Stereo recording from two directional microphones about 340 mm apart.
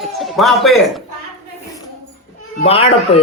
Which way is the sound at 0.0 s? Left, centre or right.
Centre.